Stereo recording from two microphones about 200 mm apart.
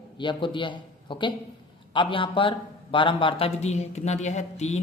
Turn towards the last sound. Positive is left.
turn(degrees=35)  # may be behind; listen again after turning